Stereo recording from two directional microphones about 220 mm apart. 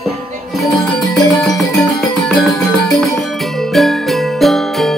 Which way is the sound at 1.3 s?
Centre (ahead or behind).